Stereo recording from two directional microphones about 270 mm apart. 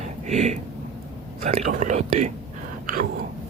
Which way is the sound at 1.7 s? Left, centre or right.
Right.